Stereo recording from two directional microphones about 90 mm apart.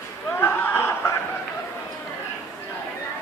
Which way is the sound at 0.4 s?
25° left (ahead or behind).